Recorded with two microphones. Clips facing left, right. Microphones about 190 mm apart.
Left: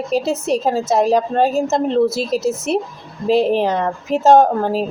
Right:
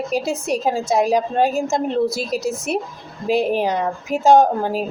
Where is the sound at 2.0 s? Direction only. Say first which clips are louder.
Left 4 dB; 30° left (ahead or behind).